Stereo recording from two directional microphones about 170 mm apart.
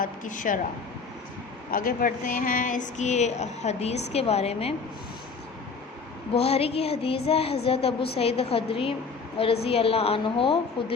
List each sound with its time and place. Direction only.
0.0 s a woman's voice: 50° left (ahead or behind)
1.7 s a woman's voice: 55° left (ahead or behind); by 4.7 s 35° left (ahead or behind)
6.3 s a woman's voice: 35° left (ahead or behind)